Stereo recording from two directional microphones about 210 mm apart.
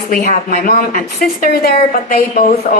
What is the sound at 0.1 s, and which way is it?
A woman's voice, 40° left (ahead or behind).